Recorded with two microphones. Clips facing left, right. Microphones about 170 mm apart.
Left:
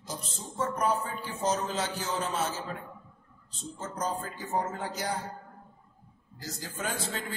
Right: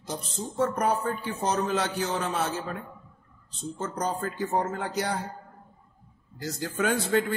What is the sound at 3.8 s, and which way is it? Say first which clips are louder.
Speech: right 3 dB; 70° right (ahead or behind).